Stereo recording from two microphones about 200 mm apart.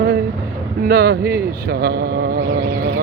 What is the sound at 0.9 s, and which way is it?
Speech, 50° right (ahead or behind).